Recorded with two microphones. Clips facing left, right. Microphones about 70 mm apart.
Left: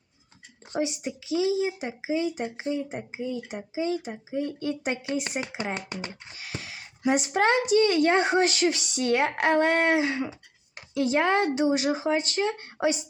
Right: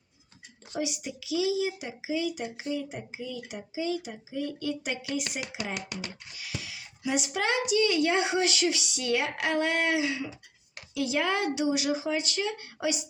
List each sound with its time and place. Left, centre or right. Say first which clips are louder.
0.7 s speech: left 4 dB; left